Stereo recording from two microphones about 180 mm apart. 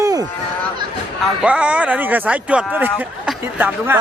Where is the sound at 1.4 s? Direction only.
5° right (ahead or behind).